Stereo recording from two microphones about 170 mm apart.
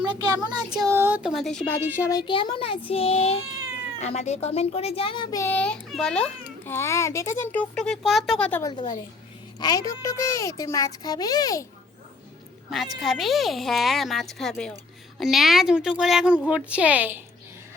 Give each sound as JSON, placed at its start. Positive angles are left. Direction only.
{"t": 0.0, "sound": "a child's voice", "side_deg": -25}
{"t": 5.4, "sound": "a child's voice", "side_deg": 10}
{"t": 8.6, "sound": "a child's voice", "side_deg": 25}
{"t": 13.0, "sound": "a woman's voice", "side_deg": 0}